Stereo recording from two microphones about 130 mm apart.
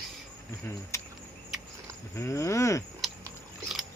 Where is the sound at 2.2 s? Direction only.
20° left (ahead or behind).